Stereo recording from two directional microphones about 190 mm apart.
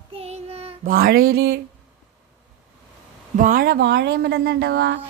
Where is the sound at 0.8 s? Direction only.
50° right (ahead or behind).